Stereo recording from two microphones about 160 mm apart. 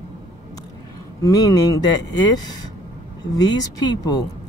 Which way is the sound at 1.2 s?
20° left (ahead or behind).